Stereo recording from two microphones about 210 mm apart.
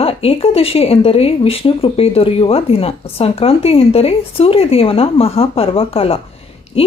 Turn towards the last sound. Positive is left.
turn(degrees=25)  # may be behind; listen again after turning